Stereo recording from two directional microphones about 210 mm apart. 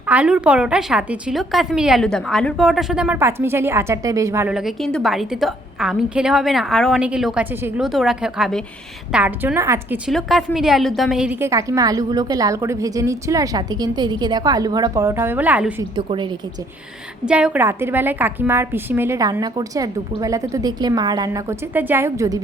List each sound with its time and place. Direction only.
0.1 s a woman's voice: 5° right (ahead or behind)
10.1 s a woman's voice: centre (ahead or behind)
16.0 s speech: 20° right (ahead or behind)
17.2 s a woman's voice: 5° right (ahead or behind)